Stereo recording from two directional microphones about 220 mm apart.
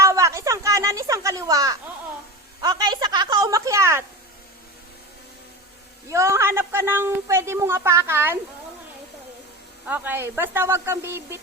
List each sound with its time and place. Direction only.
0.0 s a sound: 15° right (ahead or behind)
2.6 s a woman's voice: 20° right (ahead or behind)
6.1 s a woman's voice: 15° right (ahead or behind)
9.8 s a woman's voice: 10° right (ahead or behind)